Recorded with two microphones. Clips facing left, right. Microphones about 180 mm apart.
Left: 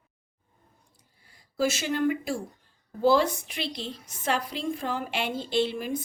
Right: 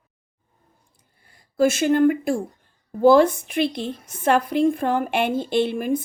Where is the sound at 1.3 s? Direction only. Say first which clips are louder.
Right 8 dB; 55° right (ahead or behind).